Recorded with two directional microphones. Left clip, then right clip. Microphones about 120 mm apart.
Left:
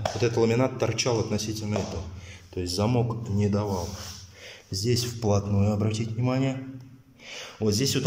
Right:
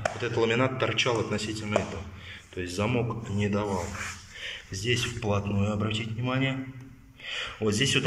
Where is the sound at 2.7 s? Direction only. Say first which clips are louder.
Left 2 dB; 45° left (ahead or behind).